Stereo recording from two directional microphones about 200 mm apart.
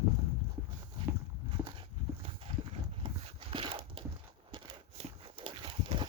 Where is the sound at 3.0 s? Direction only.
25° right (ahead or behind).